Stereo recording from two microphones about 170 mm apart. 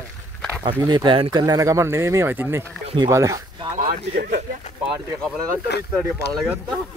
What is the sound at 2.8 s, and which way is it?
Speech, 30° right (ahead or behind).